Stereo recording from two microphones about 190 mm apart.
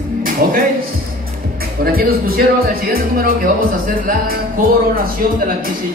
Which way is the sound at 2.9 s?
50° right (ahead or behind).